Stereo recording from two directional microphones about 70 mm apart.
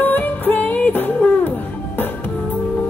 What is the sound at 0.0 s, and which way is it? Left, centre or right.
Music, left.